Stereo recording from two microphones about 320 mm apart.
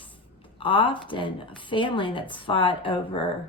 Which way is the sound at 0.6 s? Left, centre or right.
Centre.